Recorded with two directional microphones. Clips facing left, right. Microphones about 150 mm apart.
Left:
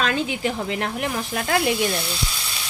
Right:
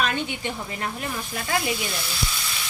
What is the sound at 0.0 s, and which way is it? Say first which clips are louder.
Speech: left 3 dB; 90° left.